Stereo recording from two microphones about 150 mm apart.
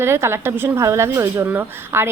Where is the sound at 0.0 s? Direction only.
15° right (ahead or behind).